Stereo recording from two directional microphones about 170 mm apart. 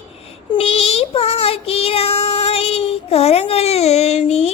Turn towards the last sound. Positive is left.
turn(degrees=40)  # may be behind; listen again after turning